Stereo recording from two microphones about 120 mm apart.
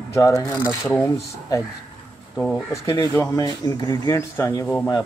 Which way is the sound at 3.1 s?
25° left (ahead or behind).